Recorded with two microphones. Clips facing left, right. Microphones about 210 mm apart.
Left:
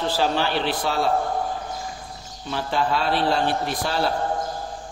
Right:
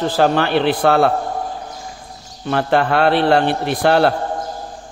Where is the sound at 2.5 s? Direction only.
65° right (ahead or behind).